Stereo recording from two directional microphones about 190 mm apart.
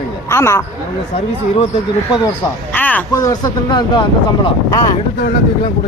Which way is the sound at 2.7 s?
10° left (ahead or behind).